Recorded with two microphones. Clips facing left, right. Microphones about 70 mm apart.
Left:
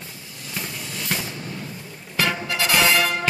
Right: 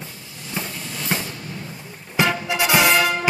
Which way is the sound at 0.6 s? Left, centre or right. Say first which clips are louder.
Right 2 dB; right.